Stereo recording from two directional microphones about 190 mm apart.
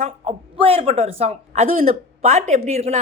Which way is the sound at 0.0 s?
35° right (ahead or behind).